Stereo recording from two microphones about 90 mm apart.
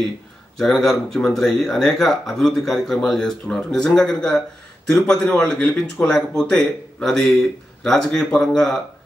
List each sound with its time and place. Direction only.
0.6 s speech: 5° left (ahead or behind)